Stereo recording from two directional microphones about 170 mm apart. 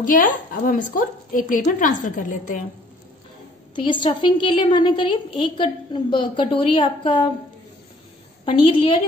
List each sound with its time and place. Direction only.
0.0 s a woman's voice: 55° left (ahead or behind)
3.7 s a woman's voice: 30° left (ahead or behind)
8.5 s a woman's voice: 30° left (ahead or behind)